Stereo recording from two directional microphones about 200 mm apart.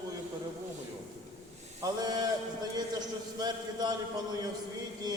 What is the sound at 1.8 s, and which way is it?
A man's voice, 20° right (ahead or behind).